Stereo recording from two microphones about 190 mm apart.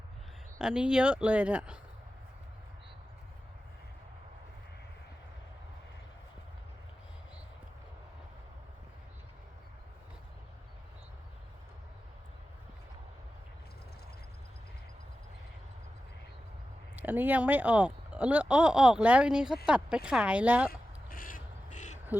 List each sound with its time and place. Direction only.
0.6 s speech: 5° right (ahead or behind)
17.0 s speech: 10° right (ahead or behind)
20.7 s crow: 50° left (ahead or behind)